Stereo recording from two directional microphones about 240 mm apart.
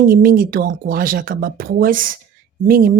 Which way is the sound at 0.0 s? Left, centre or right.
Right.